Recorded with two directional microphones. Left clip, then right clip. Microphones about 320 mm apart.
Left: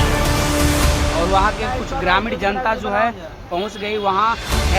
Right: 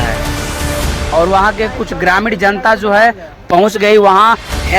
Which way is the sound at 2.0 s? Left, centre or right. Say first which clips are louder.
Right 7 dB; centre.